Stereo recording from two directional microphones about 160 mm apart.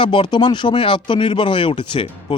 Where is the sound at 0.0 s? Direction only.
30° left (ahead or behind).